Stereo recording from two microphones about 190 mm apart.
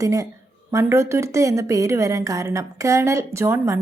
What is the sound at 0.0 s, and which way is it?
A woman's voice, 15° right (ahead or behind).